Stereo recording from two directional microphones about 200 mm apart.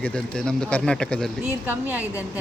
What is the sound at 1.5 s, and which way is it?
Speech, 10° right (ahead or behind).